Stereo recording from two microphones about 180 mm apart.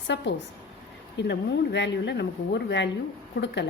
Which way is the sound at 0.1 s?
75° left (ahead or behind).